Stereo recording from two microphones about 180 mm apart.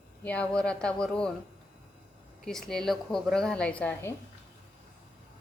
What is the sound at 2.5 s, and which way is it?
A woman's voice, centre (ahead or behind).